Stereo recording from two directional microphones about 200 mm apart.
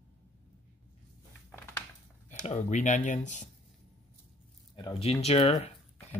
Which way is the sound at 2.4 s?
35° left (ahead or behind).